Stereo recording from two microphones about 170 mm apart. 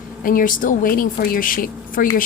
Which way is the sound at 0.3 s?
55° left (ahead or behind).